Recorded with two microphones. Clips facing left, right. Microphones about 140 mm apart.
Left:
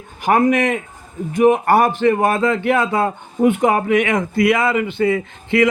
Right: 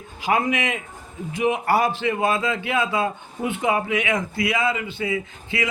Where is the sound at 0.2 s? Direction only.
55° left (ahead or behind).